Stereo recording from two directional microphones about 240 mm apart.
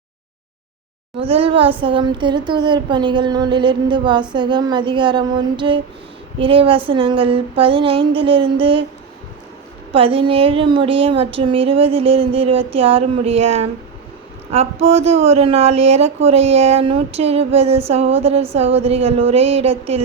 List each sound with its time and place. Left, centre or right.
1.1 s speech: right
9.9 s speech: right